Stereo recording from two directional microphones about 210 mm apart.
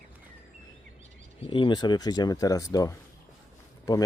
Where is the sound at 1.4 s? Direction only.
25° left (ahead or behind).